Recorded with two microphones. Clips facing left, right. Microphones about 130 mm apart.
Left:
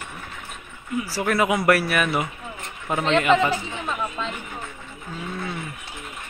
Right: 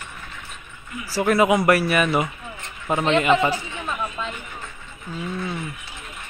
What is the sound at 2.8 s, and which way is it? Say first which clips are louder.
Speech: right 1 dB; 10° right (ahead or behind).